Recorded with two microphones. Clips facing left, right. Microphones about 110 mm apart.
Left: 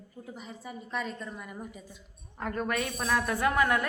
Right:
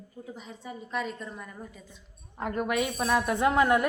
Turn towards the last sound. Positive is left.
turn(degrees=-20)  # may be behind; listen again after turning